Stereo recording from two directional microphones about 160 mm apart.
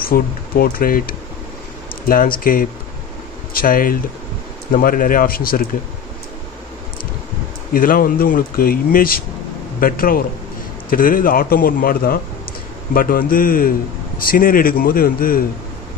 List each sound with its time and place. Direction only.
0.1 s speech: 65° left (ahead or behind)
7.7 s speech: 65° left (ahead or behind)